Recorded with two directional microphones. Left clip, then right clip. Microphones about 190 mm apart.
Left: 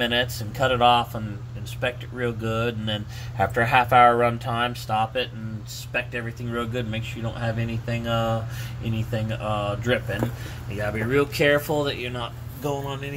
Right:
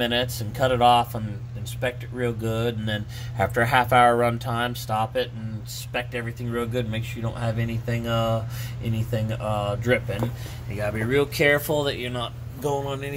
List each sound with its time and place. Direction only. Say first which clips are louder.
0.0 s speech: left 1 dB; 20° right (ahead or behind)
12.6 s speech: right 2 dB; 20° right (ahead or behind)